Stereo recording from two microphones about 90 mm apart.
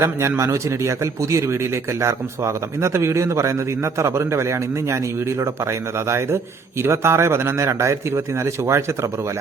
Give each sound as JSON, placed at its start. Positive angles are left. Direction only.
{"t": 0.0, "sound": "speech", "side_deg": -30}